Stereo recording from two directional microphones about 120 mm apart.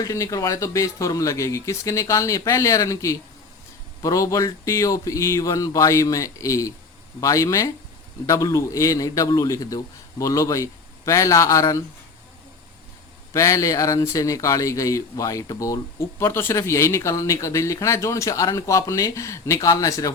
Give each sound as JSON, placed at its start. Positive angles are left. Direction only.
{"t": 0.0, "sound": "speech", "side_deg": 25}
{"t": 13.3, "sound": "speech", "side_deg": 25}